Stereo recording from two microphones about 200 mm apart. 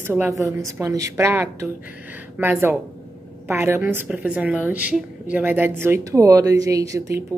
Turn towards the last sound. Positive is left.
turn(degrees=-15)  # may be behind; listen again after turning